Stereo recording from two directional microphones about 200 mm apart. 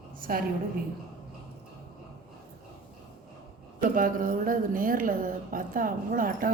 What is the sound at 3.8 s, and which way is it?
A woman's voice, 45° right (ahead or behind).